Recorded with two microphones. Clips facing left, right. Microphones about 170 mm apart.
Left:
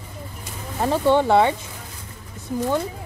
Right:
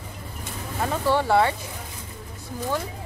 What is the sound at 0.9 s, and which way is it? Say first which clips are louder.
Speech: left 4 dB; 20° left (ahead or behind).